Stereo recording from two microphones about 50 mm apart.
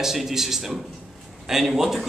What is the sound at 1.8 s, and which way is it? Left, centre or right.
Speech, centre.